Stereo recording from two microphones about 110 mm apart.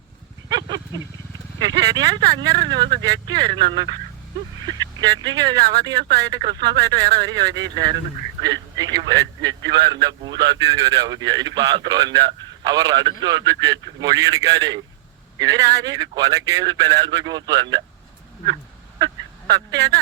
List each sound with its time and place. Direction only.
0.4 s a sound: 40° right (ahead or behind)
1.5 s a man's voice: 40° right (ahead or behind)
19.5 s a man's voice: 35° right (ahead or behind)